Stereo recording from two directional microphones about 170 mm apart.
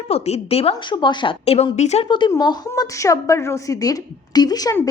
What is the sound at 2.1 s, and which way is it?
A woman's voice, 25° left (ahead or behind).